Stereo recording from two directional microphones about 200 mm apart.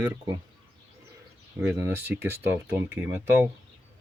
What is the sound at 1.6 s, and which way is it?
Speech, 10° right (ahead or behind).